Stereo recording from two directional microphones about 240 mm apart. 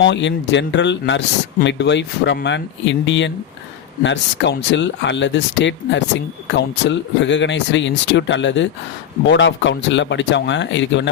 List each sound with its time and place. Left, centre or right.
0.0 s speech: left